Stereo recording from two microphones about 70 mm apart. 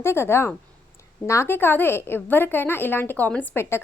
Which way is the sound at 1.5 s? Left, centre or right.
Left.